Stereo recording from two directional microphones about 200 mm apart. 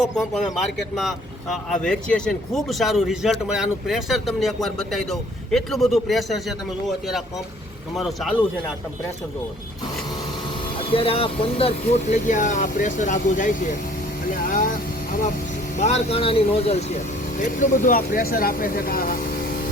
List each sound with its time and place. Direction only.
0.9 s speech: centre (ahead or behind)
7.9 s speech: centre (ahead or behind)
10.8 s speech: 25° left (ahead or behind)
14.3 s vehicle: 45° left (ahead or behind)
15.8 s speech: 30° left (ahead or behind)
17.4 s speech: 40° left (ahead or behind)